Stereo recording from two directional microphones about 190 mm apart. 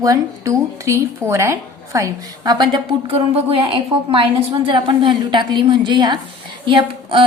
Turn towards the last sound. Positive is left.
turn(degrees=-25)  # may be behind; listen again after turning